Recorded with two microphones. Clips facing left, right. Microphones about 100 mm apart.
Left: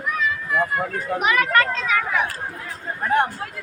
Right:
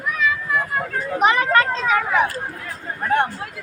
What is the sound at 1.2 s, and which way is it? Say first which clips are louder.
Speech: right 3 dB; 30° right (ahead or behind).